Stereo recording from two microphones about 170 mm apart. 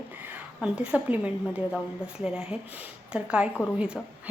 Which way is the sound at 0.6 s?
5° right (ahead or behind).